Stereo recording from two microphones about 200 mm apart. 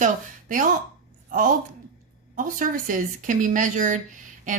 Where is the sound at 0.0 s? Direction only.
40° right (ahead or behind).